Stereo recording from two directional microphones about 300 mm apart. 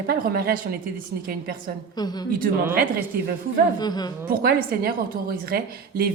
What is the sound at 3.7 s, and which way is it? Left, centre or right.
Speech, centre.